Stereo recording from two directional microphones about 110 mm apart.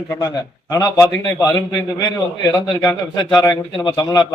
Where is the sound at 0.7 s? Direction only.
30° left (ahead or behind).